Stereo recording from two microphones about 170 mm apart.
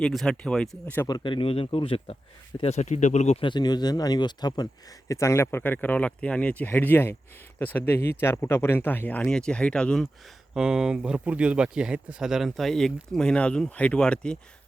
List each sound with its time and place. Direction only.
0.0 s speech: centre (ahead or behind)
1.0 s speech: 25° left (ahead or behind); by 3.3 s 45° left (ahead or behind)
3.4 s speech: 25° left (ahead or behind); by 14.3 s 5° left (ahead or behind)